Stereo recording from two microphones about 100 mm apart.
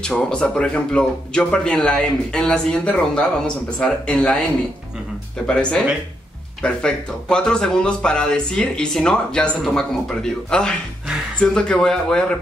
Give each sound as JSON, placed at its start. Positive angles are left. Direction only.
{"t": 0.0, "sound": "speech", "side_deg": 10}
{"t": 5.5, "sound": "speech", "side_deg": 10}